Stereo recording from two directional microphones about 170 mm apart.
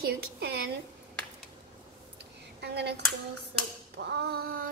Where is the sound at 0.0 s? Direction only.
75° right (ahead or behind).